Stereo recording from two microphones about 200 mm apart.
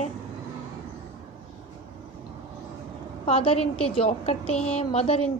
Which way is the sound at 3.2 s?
30° left (ahead or behind).